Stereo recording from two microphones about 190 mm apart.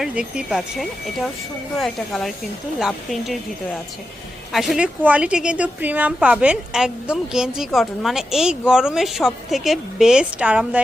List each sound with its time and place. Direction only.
0.0 s a woman's voice: 5° right (ahead or behind)